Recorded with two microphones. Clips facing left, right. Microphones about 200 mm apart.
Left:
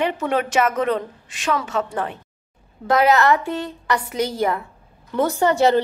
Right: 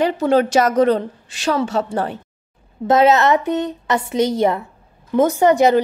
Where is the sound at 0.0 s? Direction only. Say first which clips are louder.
Right 6 dB; 35° right (ahead or behind).